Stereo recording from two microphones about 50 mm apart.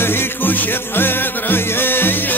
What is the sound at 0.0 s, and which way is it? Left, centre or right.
Music, left.